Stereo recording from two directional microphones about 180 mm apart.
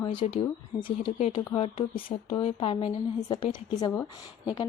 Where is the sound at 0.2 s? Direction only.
30° left (ahead or behind).